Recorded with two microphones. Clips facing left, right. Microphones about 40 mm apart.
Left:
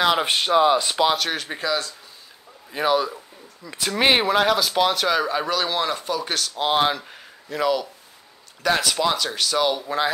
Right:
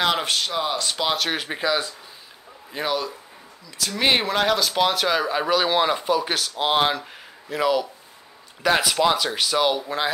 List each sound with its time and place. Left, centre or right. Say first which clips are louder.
0.2 s speech: left 6 dB; left
1.0 s speech: left 1 dB; centre
1.3 s speech: right 1 dB; centre
2.7 s speech: left 5 dB; centre
3.6 s speech: left 3 dB; left
4.0 s speech: left 2 dB; centre